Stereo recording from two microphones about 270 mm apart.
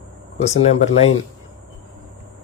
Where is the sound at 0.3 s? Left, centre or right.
Left.